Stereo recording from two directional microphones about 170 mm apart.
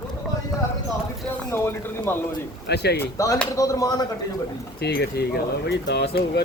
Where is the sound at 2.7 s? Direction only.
75° left (ahead or behind).